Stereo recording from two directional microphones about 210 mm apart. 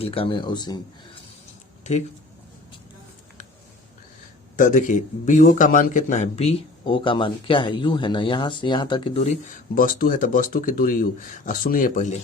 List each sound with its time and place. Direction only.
0.0 s speech: 25° left (ahead or behind)
1.8 s speech: 30° left (ahead or behind)
4.5 s speech: 40° left (ahead or behind)